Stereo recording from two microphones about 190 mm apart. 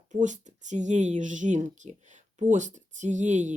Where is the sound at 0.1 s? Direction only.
40° right (ahead or behind).